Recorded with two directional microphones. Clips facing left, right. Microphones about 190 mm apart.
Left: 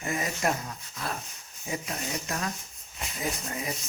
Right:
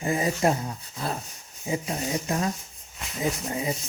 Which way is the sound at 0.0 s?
30° right (ahead or behind).